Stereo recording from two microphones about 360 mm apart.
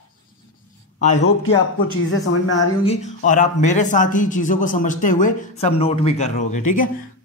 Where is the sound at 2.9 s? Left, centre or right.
Centre.